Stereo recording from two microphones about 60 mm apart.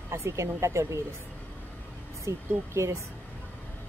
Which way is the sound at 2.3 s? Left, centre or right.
Right.